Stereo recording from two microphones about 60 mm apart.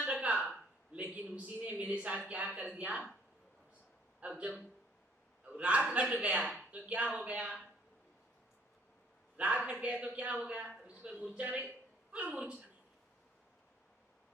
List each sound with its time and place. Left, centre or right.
0.0 s a sound: centre
0.9 s a man's voice: right
4.2 s a man's voice: right
9.4 s a man's voice: right
10.8 s a sound: right
11.3 s a man's voice: right